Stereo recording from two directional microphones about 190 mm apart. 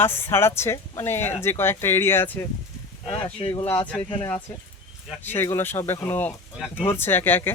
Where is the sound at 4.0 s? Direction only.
25° left (ahead or behind).